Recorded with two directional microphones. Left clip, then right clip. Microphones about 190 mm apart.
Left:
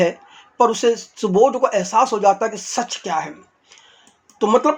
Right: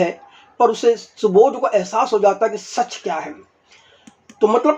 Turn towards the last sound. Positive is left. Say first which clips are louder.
# right 1 dB
turn(degrees=25)  # may be behind; listen again after turning